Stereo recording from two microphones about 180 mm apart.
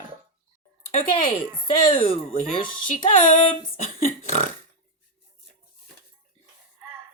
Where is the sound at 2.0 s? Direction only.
30° left (ahead or behind).